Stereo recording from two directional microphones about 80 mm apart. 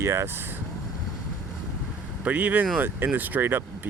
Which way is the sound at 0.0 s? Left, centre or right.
Right.